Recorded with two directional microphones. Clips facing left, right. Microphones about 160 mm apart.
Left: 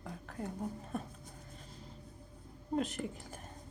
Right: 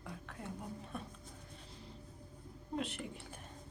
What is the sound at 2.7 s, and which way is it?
Speech, 40° left (ahead or behind).